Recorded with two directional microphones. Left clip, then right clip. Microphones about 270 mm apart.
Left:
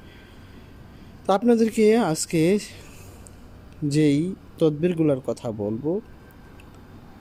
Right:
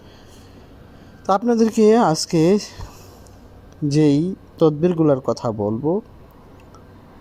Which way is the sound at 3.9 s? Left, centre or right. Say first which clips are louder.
Right 4 dB; centre.